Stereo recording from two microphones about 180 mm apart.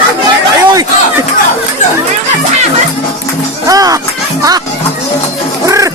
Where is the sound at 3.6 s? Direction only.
20° right (ahead or behind).